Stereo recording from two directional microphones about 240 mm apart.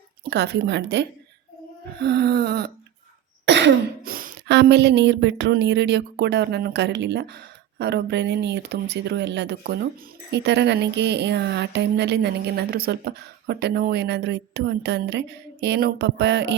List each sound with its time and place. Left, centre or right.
0.3 s speech: right
2.0 s a sound: right
3.4 s speech: right